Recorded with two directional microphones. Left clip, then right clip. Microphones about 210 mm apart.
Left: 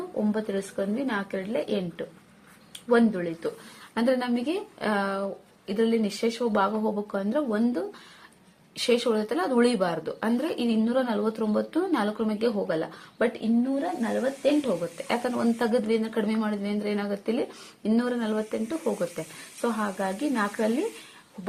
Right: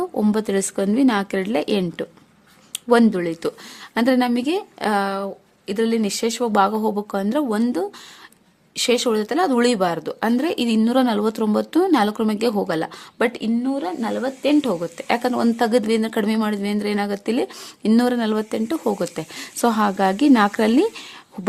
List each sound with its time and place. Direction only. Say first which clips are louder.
0.3 s a woman's voice: right 8 dB; 45° right (ahead or behind)
3.9 s a woman's voice: right 6 dB; 35° right (ahead or behind)
14.9 s a woman's voice: right 7 dB; 35° right (ahead or behind)